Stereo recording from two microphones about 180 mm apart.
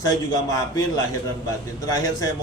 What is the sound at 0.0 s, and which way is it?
A man's voice, 20° left (ahead or behind).